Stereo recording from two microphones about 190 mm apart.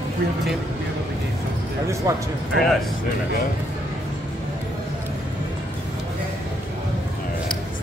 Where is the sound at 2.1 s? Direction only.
15° right (ahead or behind).